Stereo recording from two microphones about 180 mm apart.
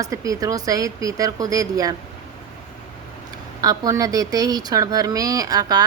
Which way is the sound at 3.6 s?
20° right (ahead or behind).